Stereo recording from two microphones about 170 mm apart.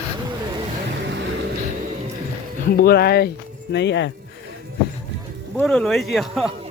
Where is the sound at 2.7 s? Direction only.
65° left (ahead or behind); by 4.1 s 90° left.